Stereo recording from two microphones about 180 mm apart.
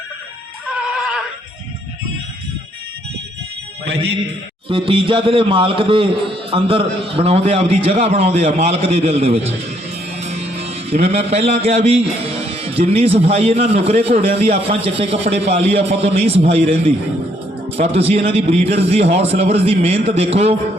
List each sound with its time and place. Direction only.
3.8 s a man's voice: 70° right (ahead or behind)
4.7 s a man's voice: 30° right (ahead or behind)
10.2 s music: 35° right (ahead or behind)
11.0 s speech: 35° right (ahead or behind)